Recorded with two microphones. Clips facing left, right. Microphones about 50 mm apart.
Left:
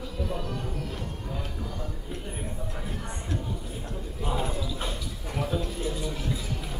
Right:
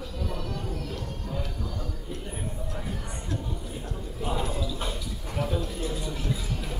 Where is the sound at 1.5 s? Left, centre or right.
Centre.